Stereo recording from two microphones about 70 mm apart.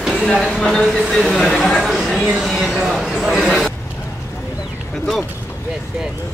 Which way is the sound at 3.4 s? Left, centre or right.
Centre.